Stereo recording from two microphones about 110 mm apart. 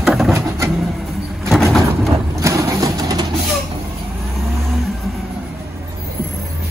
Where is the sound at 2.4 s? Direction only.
30° right (ahead or behind).